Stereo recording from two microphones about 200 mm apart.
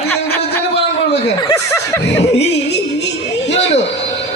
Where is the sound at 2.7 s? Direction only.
60° left (ahead or behind).